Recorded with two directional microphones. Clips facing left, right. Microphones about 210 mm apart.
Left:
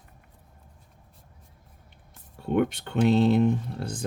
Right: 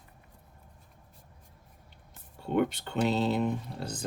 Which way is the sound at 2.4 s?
55° left (ahead or behind).